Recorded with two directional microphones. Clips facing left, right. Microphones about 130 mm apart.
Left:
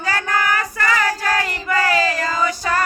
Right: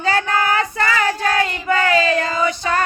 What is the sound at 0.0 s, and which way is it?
Child singing, 25° right (ahead or behind).